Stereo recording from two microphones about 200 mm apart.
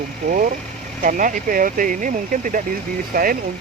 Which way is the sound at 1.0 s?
40° right (ahead or behind).